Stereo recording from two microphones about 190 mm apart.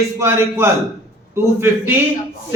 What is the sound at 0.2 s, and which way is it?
A man's voice, 15° right (ahead or behind).